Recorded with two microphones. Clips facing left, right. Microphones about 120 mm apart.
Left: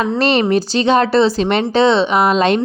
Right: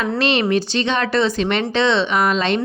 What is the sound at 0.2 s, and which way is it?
A woman's voice, 40° left (ahead or behind).